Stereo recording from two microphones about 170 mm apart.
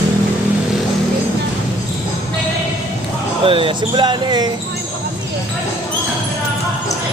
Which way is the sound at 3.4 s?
30° right (ahead or behind).